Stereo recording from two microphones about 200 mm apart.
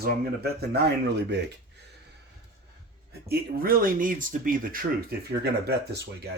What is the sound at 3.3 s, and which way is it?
Speech, 45° right (ahead or behind).